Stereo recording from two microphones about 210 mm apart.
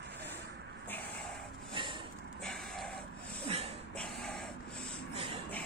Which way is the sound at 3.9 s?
5° left (ahead or behind).